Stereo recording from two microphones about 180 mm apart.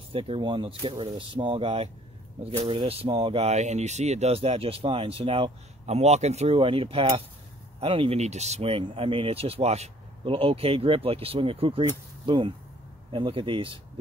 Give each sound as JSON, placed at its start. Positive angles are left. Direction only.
{"t": 0.1, "sound": "speech", "side_deg": -30}